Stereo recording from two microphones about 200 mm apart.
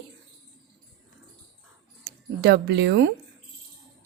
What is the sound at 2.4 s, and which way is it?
Speech, 60° right (ahead or behind).